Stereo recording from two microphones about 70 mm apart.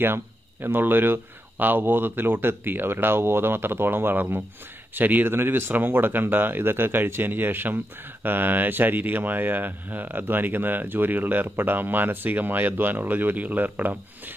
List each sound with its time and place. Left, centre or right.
0.0 s speech: right